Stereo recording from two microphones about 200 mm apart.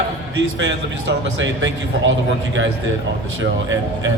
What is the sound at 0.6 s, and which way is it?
A man's voice, 65° right (ahead or behind).